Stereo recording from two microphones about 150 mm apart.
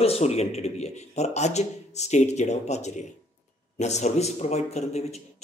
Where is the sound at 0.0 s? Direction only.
45° left (ahead or behind).